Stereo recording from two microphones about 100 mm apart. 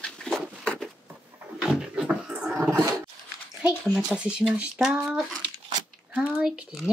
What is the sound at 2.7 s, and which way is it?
Dog, 35° right (ahead or behind).